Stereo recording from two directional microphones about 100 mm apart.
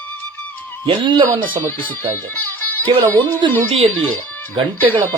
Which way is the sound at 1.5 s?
15° left (ahead or behind).